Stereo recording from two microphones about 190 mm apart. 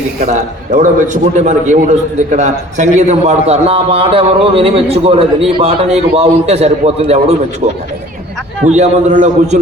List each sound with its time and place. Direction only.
0.3 s a man's voice: 40° right (ahead or behind)
8.7 s a man's voice: 40° right (ahead or behind)